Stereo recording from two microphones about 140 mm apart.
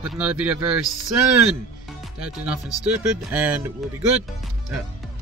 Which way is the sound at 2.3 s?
10° right (ahead or behind).